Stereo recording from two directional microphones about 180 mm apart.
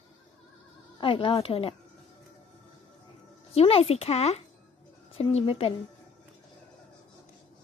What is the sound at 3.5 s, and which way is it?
Speech, 35° left (ahead or behind).